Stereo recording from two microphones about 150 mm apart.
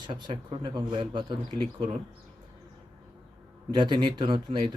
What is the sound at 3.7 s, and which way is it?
Speech, 30° right (ahead or behind).